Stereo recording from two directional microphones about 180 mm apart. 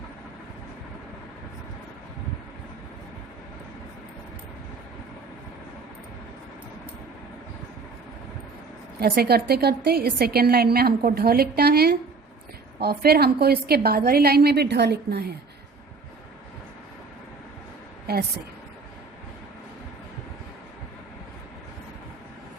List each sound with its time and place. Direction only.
9.0 s a woman's voice: 55° right (ahead or behind)
18.1 s a woman's voice: 60° right (ahead or behind)